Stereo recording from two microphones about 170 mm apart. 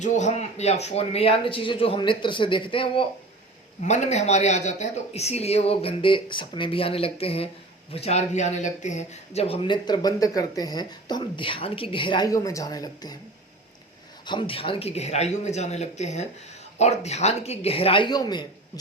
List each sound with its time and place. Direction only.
0.0 s speech: 45° left (ahead or behind)
3.8 s speech: 45° left (ahead or behind); by 13.1 s 25° left (ahead or behind)
14.3 s speech: 30° left (ahead or behind)